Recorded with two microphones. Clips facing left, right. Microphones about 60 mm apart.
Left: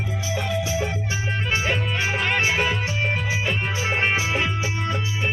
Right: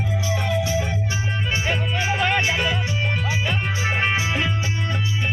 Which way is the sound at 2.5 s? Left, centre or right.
Left.